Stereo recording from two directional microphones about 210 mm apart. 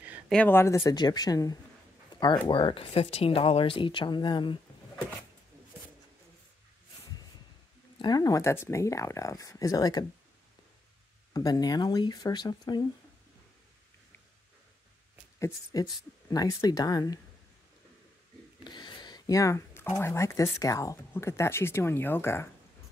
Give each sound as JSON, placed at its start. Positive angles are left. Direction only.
{"t": 0.3, "sound": "speech", "side_deg": 10}
{"t": 8.0, "sound": "speech", "side_deg": 20}
{"t": 11.3, "sound": "speech", "side_deg": 20}
{"t": 15.3, "sound": "speech", "side_deg": 15}
{"t": 18.6, "sound": "speech", "side_deg": 20}